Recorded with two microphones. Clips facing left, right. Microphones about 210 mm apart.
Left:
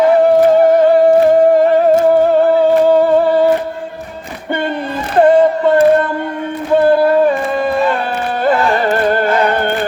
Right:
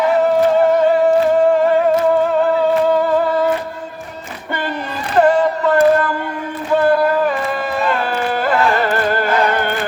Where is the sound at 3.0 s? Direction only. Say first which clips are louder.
Left 5 dB; 30° left (ahead or behind).